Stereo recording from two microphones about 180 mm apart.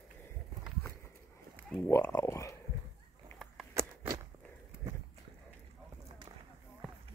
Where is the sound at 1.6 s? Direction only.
10° left (ahead or behind).